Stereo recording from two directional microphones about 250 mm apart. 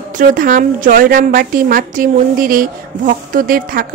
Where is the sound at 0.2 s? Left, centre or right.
Right.